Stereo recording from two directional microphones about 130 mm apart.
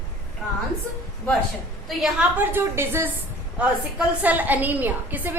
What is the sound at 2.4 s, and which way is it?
Speech, 15° right (ahead or behind).